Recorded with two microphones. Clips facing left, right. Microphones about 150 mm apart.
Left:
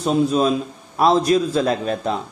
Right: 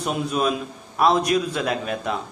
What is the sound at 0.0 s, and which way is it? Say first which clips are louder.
A man's voice: left 6 dB; 30° left (ahead or behind).